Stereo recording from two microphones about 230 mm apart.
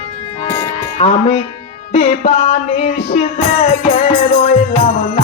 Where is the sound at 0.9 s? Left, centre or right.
Left.